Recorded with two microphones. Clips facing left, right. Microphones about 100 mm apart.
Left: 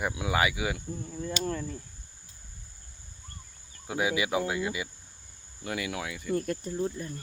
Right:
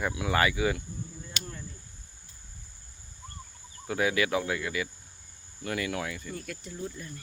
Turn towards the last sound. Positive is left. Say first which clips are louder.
# left 7 dB
turn(degrees=35)  # may be behind; listen again after turning